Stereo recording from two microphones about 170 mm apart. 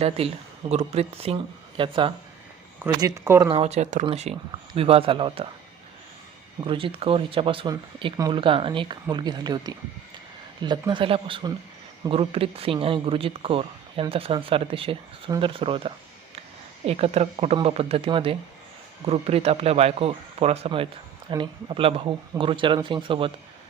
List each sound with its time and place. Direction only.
0.7 s speech: 40° right (ahead or behind)
2.8 s speech: 15° right (ahead or behind)
3.5 s speech: 40° right (ahead or behind)
6.7 s speech: 30° right (ahead or behind)